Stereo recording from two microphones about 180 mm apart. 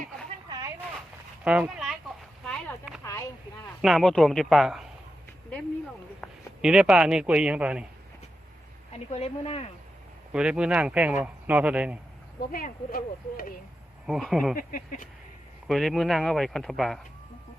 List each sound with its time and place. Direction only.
0.4 s a sound: 20° right (ahead or behind)
1.5 s speech: 5° right (ahead or behind)
2.4 s a sound: centre (ahead or behind)
3.0 s a sound: 15° left (ahead or behind)
3.8 s speech: centre (ahead or behind)
6.2 s a man's voice: 5° right (ahead or behind)
9.0 s speech: 35° left (ahead or behind)
10.3 s speech: 5° right (ahead or behind)
12.4 s speech: 55° left (ahead or behind)
14.1 s speech: centre (ahead or behind)
15.6 s speech: centre (ahead or behind)